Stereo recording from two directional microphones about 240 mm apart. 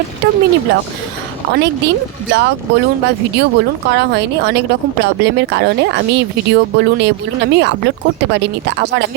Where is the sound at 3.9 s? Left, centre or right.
Right.